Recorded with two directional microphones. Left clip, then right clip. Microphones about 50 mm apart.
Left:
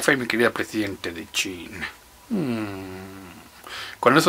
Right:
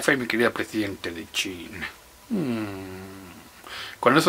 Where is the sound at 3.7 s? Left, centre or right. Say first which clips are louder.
Left 2 dB; left.